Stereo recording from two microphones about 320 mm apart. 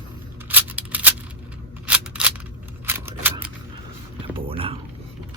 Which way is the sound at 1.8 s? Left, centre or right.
Centre.